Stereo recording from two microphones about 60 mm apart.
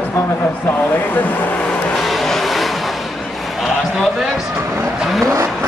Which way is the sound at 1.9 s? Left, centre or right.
Centre.